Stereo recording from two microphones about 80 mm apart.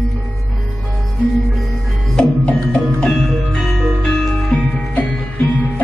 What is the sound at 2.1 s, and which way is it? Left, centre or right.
Music, centre.